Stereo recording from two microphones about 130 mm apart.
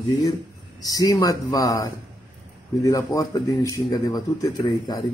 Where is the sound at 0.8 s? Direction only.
25° left (ahead or behind).